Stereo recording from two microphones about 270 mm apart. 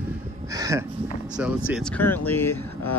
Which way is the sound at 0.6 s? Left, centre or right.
Centre.